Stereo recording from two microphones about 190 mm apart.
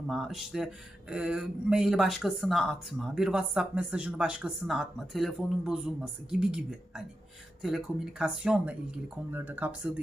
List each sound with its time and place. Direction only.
0.1 s speech: centre (ahead or behind)